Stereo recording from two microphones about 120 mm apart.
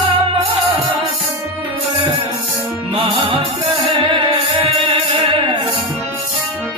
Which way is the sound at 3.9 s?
45° right (ahead or behind).